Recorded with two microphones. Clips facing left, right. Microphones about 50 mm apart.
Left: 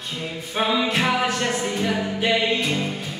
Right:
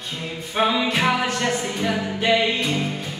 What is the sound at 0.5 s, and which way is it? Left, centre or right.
Music, centre.